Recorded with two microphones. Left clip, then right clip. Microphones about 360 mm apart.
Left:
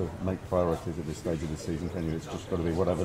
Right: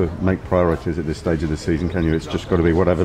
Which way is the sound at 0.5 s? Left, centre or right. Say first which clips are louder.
Right 9 dB; right.